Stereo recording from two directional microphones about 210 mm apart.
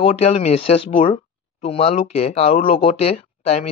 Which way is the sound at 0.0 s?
30° left (ahead or behind).